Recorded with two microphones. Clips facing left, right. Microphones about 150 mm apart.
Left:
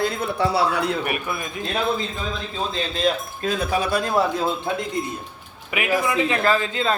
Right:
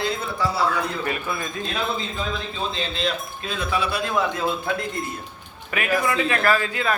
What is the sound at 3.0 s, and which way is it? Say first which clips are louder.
Speech: left 7 dB; 40° left (ahead or behind).